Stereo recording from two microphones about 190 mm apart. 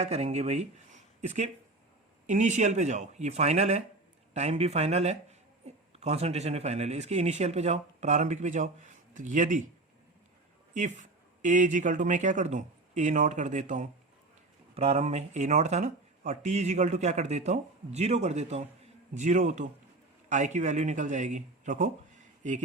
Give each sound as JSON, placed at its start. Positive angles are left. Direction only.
{"t": 0.0, "sound": "speech", "side_deg": -35}
{"t": 10.8, "sound": "speech", "side_deg": -40}